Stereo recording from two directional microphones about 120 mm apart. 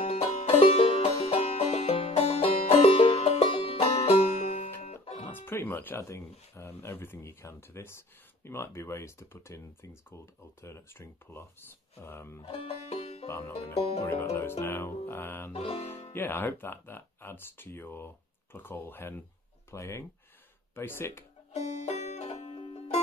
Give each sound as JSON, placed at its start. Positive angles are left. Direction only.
{"t": 0.0, "sound": "music", "side_deg": 60}
{"t": 5.3, "sound": "speech", "side_deg": 20}
{"t": 12.4, "sound": "banjo", "side_deg": 55}
{"t": 13.7, "sound": "music", "side_deg": 60}
{"t": 14.0, "sound": "speech", "side_deg": 20}
{"t": 15.5, "sound": "music", "side_deg": 55}
{"t": 16.1, "sound": "speech", "side_deg": 15}
{"t": 21.5, "sound": "music", "side_deg": 70}